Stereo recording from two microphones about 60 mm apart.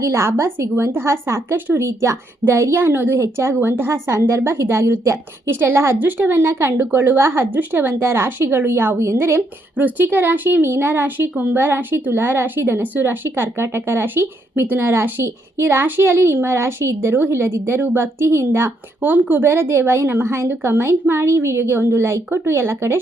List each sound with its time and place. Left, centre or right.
0.0 s a woman's voice: right
6.0 s speech: right
9.7 s speech: right
19.0 s speech: right
19.5 s a woman's voice: right